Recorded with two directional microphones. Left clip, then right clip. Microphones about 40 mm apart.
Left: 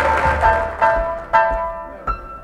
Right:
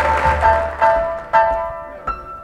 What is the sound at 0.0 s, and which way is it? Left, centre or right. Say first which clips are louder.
Music: right 1 dB; left.